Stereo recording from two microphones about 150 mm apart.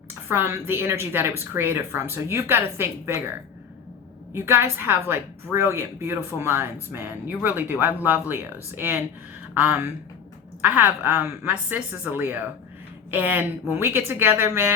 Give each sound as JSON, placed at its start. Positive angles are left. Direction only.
{"t": 0.3, "sound": "a woman's voice", "side_deg": -15}
{"t": 4.3, "sound": "a woman's voice", "side_deg": -15}